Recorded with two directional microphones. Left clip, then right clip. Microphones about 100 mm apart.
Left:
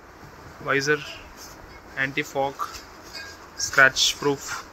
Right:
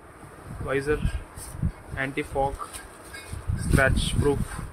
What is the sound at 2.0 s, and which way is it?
Speech, 25° right (ahead or behind).